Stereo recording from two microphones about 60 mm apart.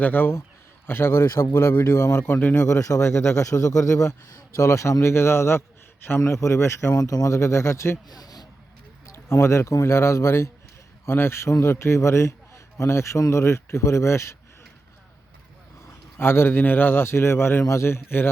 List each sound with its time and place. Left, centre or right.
0.0 s a man's voice: left
2.2 s a man's voice: left
2.6 s speech: left
6.9 s speech: left
7.3 s speech: left
8.1 s a sound: left
9.1 s speech: left
16.1 s a man's voice: left